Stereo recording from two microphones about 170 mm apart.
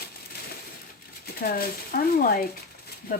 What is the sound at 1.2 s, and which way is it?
Speech, 60° left (ahead or behind).